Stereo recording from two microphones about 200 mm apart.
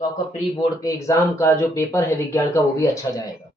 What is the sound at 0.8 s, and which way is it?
Speech, 15° left (ahead or behind).